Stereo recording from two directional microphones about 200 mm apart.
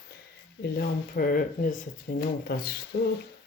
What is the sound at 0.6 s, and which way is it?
Speech, 50° left (ahead or behind).